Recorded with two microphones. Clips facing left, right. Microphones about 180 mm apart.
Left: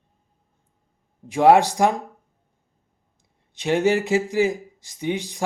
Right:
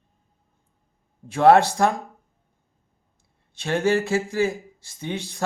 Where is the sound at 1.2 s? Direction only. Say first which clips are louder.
Even; 15° left (ahead or behind).